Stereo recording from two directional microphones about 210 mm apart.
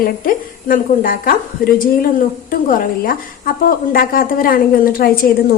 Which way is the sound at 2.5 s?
40° left (ahead or behind).